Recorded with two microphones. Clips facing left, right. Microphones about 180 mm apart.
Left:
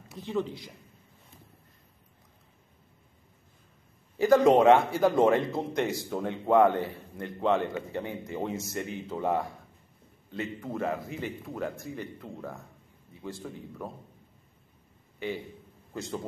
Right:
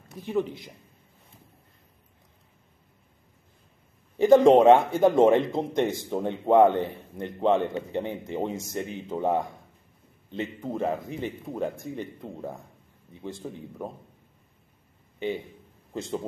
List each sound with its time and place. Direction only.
0.2 s a man's voice: 15° right (ahead or behind)
4.2 s speech: 20° right (ahead or behind)
15.1 s a man's voice: 20° right (ahead or behind)